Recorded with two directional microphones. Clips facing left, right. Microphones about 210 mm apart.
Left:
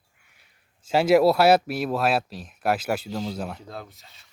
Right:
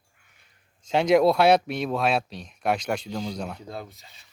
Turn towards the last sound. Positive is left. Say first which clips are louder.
# right 2 dB
turn(degrees=0)  # may be behind; listen again after turning